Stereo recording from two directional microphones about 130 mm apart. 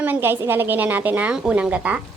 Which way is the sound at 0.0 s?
15° right (ahead or behind).